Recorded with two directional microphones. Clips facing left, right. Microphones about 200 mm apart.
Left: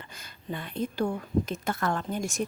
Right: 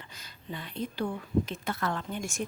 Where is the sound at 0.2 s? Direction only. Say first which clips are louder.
Left 4 dB; 50° left (ahead or behind).